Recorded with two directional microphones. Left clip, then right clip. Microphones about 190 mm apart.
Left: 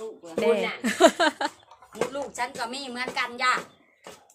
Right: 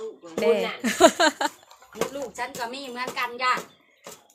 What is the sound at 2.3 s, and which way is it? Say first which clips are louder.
A woman's voice: left 1 dB; 50° left (ahead or behind).